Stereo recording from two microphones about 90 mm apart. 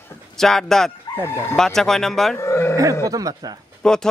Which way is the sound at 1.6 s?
5° left (ahead or behind).